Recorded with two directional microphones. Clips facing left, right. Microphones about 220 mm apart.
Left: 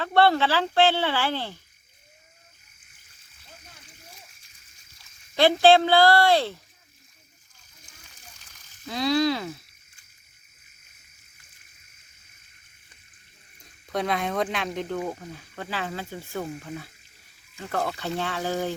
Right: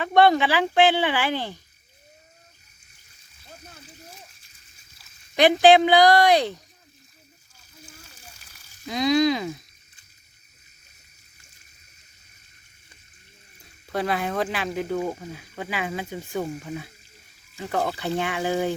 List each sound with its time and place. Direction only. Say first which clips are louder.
0.0 s speech: right 2 dB; 15° right (ahead or behind)
5.4 s speech: right 2 dB; 15° right (ahead or behind)
8.4 s a sound: right 2 dB; 10° right (ahead or behind)
13.8 s speech: right 1 dB; 5° right (ahead or behind)